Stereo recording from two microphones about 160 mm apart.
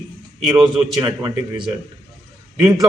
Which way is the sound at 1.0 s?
25° right (ahead or behind).